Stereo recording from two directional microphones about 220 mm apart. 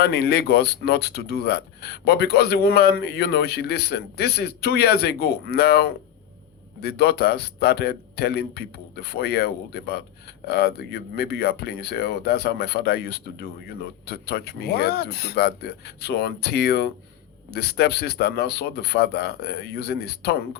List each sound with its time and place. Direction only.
0.0 s speech: 50° left (ahead or behind)